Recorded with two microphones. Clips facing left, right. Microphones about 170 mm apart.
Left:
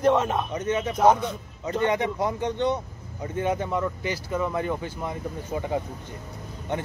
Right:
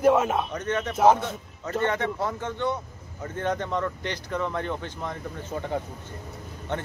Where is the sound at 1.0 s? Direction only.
5° right (ahead or behind).